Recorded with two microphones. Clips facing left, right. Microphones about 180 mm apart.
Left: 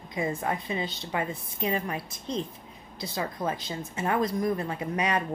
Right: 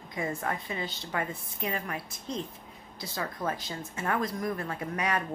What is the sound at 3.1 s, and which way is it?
Speech, 20° left (ahead or behind).